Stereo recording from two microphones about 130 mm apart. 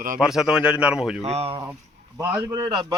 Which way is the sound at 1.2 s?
50° right (ahead or behind).